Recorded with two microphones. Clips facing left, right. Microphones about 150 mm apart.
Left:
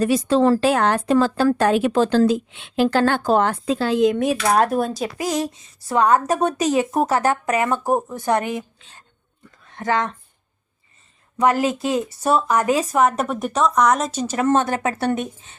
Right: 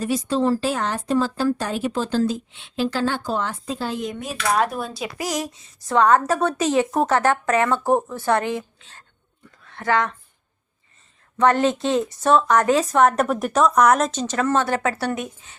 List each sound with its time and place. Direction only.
0.0 s speech: 70° left (ahead or behind)
4.7 s speech: 40° left (ahead or behind)
5.1 s speech: 25° left (ahead or behind)
5.9 s speech: 10° left (ahead or behind)
11.3 s speech: 10° left (ahead or behind)
14.1 s speech: 10° left (ahead or behind); by 15.5 s 25° left (ahead or behind)